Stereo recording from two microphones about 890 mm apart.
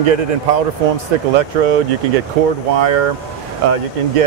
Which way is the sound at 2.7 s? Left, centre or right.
Right.